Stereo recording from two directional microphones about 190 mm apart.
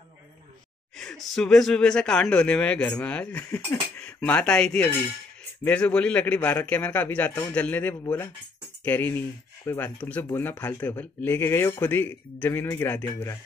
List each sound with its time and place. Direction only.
0.9 s speech: centre (ahead or behind)